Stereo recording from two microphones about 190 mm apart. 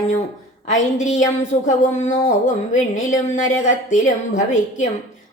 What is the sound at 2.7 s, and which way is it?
Speech, 40° left (ahead or behind).